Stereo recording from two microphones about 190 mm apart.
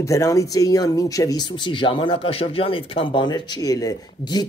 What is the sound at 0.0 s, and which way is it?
Speech, 15° left (ahead or behind).